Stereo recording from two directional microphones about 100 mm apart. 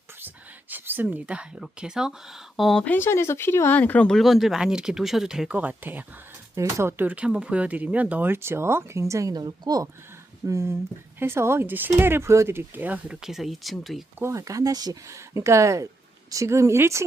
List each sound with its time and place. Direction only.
0.2 s whispering: 20° right (ahead or behind)
1.0 s speech: 10° right (ahead or behind)
2.8 s speech: 20° left (ahead or behind)
4.1 s speech: centre (ahead or behind); by 6.1 s 20° right (ahead or behind)
6.6 s speech: 30° right (ahead or behind)
6.9 s speech: 15° right (ahead or behind); by 9.9 s 40° right (ahead or behind)
10.4 s speech: 30° right (ahead or behind)
13.2 s speech: 5° right (ahead or behind)
14.2 s speech: 30° right (ahead or behind)